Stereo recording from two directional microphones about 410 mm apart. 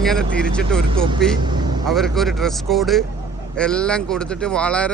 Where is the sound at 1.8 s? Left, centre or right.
Centre.